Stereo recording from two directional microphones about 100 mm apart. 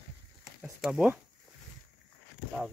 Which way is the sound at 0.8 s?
10° right (ahead or behind).